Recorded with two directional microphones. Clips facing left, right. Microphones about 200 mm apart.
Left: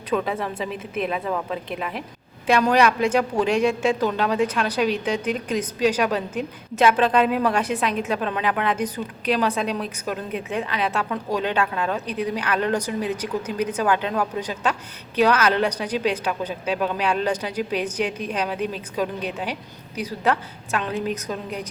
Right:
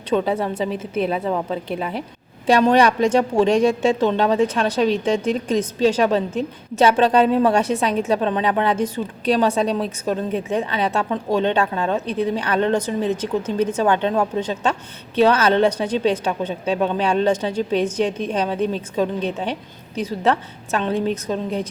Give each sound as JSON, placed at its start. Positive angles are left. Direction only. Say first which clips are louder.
{"t": 0.1, "sound": "a woman's voice", "louder": "right 4 dB", "side_deg": -30}